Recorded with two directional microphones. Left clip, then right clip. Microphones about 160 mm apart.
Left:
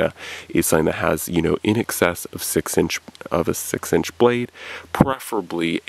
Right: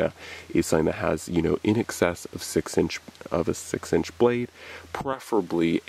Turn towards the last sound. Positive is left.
turn(degrees=30)  # may be behind; listen again after turning